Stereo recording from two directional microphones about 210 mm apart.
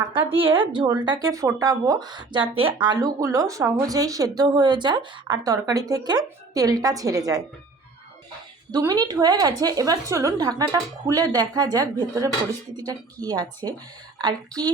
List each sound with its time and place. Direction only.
0.0 s a woman's voice: 25° right (ahead or behind)
8.7 s a woman's voice: 20° right (ahead or behind)